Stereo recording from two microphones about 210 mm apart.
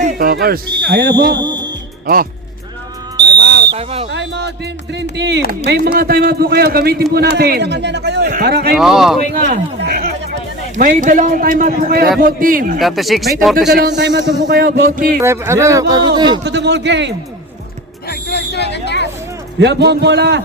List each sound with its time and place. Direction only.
0.0 s speech: 45° right (ahead or behind)
1.4 s speech: 20° right (ahead or behind)
3.2 s a sound: 50° right (ahead or behind)
3.7 s speech: 30° right (ahead or behind)
4.1 s music: 55° right (ahead or behind)
5.1 s a man's voice: 55° right (ahead or behind)
8.7 s speech: centre (ahead or behind)
9.3 s a man's voice: 45° right (ahead or behind)
12.8 s speech: centre (ahead or behind)
13.7 s a man's voice: 50° right (ahead or behind)
15.2 s a man's voice: 15° right (ahead or behind)
16.4 s a man's voice: 55° right (ahead or behind)
18.1 s hubbub: 50° left (ahead or behind)
19.5 s a man's voice: 55° right (ahead or behind)